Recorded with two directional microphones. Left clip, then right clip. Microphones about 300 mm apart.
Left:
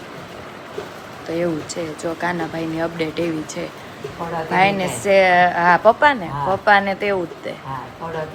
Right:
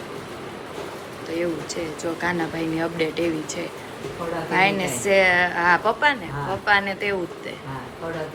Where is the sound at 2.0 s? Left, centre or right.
Centre.